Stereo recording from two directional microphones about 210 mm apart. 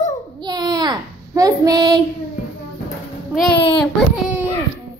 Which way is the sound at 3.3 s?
5° right (ahead or behind).